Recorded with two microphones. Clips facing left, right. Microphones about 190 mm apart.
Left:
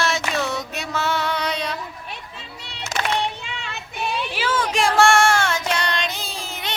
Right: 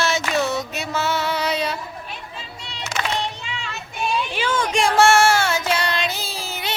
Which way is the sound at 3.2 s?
60° left (ahead or behind).